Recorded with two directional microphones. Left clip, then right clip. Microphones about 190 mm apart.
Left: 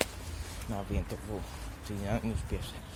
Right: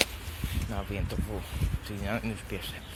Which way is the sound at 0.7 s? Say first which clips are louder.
Even; centre (ahead or behind).